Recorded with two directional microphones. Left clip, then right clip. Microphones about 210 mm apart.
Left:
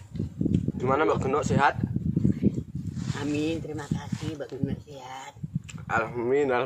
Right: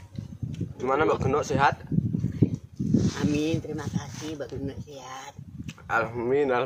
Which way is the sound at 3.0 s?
15° right (ahead or behind).